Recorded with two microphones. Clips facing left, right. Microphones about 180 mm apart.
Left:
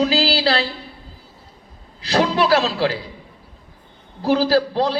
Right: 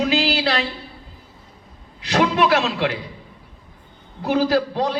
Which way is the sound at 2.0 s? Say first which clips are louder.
Even; 35° left (ahead or behind).